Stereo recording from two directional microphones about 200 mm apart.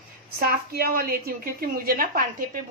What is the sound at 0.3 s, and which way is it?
A woman's voice, 50° right (ahead or behind).